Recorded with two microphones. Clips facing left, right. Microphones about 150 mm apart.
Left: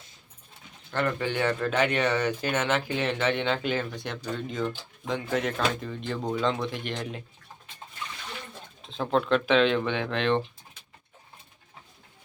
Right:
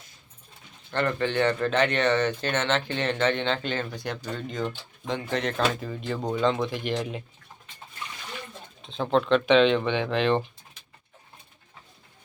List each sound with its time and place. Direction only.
0.9 s speech: 10° left (ahead or behind)
8.8 s speech: centre (ahead or behind)